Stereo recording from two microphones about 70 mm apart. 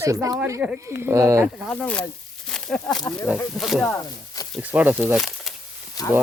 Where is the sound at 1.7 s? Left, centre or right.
Centre.